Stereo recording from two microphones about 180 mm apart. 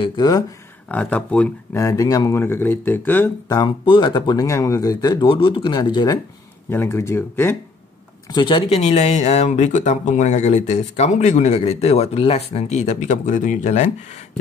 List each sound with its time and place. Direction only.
0.0 s speech: 25° left (ahead or behind)
0.8 s speech: 10° left (ahead or behind)
3.4 s speech: 25° left (ahead or behind)
6.7 s speech: 15° left (ahead or behind)
8.3 s speech: 25° left (ahead or behind)